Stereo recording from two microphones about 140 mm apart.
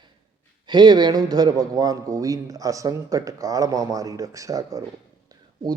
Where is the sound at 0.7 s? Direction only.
30° right (ahead or behind).